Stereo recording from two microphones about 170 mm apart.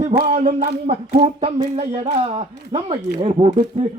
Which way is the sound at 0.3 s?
50° right (ahead or behind).